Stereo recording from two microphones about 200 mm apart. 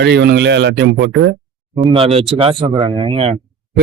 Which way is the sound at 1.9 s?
25° right (ahead or behind).